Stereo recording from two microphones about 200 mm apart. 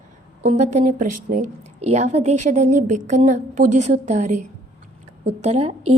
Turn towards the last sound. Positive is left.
turn(degrees=-30)  # may be behind; listen again after turning